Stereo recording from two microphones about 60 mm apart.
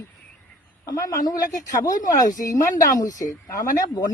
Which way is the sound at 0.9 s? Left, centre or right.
Left.